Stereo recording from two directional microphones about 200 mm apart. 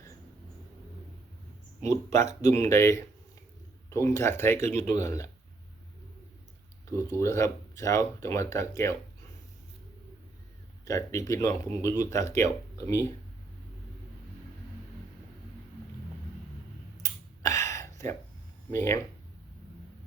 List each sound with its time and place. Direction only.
1.9 s speech: 15° left (ahead or behind)
6.9 s speech: 15° left (ahead or behind)
10.8 s speech: 15° left (ahead or behind)
17.0 s finger snapping: 15° left (ahead or behind)
18.7 s speech: 10° left (ahead or behind)